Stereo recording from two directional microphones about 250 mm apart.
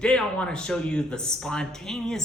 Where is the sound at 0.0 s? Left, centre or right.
Centre.